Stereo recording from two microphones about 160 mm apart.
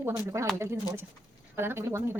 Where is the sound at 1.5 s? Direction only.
15° right (ahead or behind).